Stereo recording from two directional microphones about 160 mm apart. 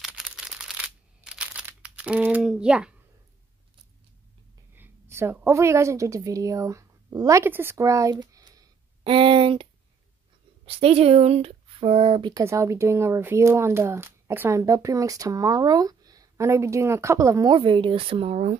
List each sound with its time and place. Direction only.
0.0 s a sound: 5° right (ahead or behind)
2.5 s speech: 5° right (ahead or behind)
4.7 s a woman's voice: 15° right (ahead or behind)
9.0 s speech: 35° right (ahead or behind)